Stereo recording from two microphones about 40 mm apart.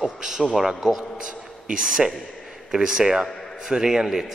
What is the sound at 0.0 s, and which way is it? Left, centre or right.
A man's voice, centre.